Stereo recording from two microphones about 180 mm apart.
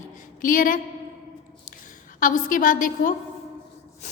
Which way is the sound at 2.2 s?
50° left (ahead or behind).